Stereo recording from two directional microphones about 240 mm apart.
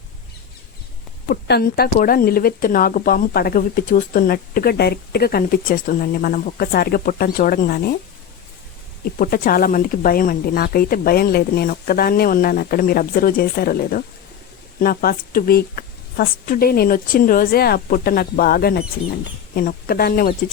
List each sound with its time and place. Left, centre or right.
1.3 s speech: left
9.1 s speech: left